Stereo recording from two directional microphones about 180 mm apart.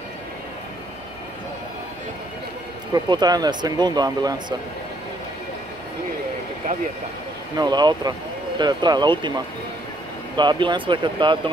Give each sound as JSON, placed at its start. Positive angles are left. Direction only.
{"t": 2.9, "sound": "speech", "side_deg": -20}
{"t": 7.5, "sound": "speech", "side_deg": -25}